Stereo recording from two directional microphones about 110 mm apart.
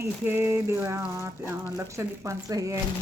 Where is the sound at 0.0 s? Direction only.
20° right (ahead or behind).